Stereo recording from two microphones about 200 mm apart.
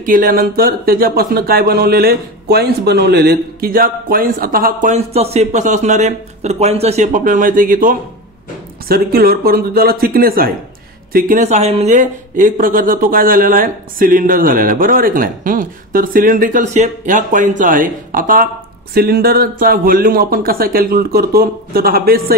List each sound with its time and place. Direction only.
0.0 s speech: 45° right (ahead or behind)